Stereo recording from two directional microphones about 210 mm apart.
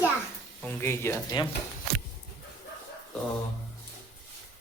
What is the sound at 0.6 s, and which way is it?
Speech, 10° left (ahead or behind).